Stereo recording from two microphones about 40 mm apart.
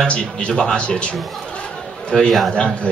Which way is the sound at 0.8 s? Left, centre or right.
Left.